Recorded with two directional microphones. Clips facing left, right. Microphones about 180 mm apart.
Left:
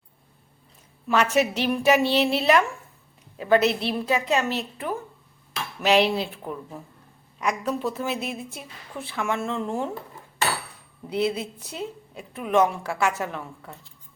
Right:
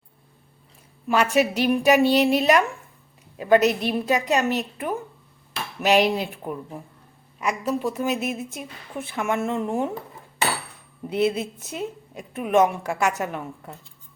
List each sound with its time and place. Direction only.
1.0 s a woman's voice: 10° right (ahead or behind)
11.0 s a woman's voice: 20° right (ahead or behind)